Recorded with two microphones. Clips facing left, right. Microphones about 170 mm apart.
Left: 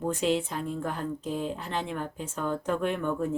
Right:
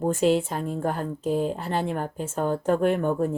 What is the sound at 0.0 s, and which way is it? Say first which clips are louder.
Speech: right 5 dB; 45° right (ahead or behind).